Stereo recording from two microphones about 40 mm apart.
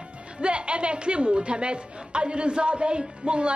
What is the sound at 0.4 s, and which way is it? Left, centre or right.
A woman's voice, right.